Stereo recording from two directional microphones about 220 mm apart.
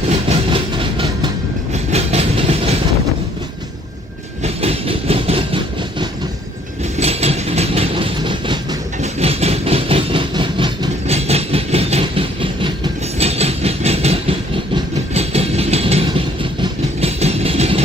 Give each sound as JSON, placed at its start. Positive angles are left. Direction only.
{"t": 0.3, "sound": "train", "side_deg": -25}
{"t": 4.4, "sound": "train", "side_deg": -25}
{"t": 17.0, "sound": "vehicle", "side_deg": -30}